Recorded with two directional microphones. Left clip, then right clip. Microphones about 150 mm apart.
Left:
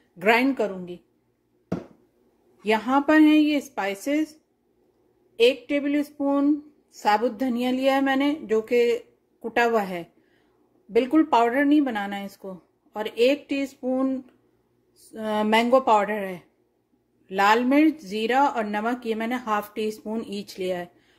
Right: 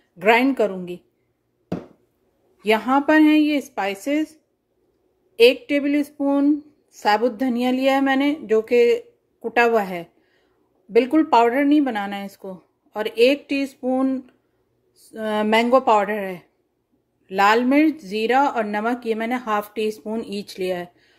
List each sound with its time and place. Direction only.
0.2 s speech: 10° right (ahead or behind)
0.6 s a woman's voice: 25° right (ahead or behind)
2.6 s speech: 15° right (ahead or behind)
5.3 s speech: 30° right (ahead or behind)